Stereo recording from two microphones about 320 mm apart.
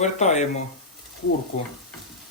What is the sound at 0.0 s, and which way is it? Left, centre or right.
Speech, left.